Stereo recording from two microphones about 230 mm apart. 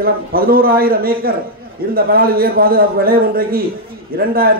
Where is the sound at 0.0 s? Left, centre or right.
Right.